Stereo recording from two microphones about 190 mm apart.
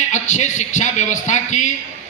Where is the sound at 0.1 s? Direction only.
40° left (ahead or behind).